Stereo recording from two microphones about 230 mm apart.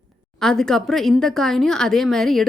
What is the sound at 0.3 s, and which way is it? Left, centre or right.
A woman's voice, centre.